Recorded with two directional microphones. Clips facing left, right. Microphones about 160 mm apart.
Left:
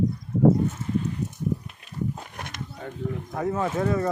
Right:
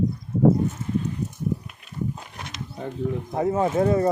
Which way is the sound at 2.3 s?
50° left (ahead or behind).